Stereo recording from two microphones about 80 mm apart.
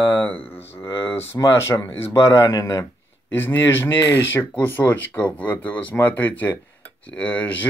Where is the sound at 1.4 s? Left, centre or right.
Left.